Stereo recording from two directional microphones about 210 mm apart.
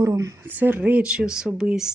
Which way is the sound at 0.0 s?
15° right (ahead or behind).